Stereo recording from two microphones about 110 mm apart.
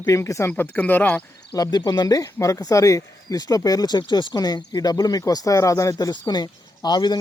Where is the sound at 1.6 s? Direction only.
40° left (ahead or behind).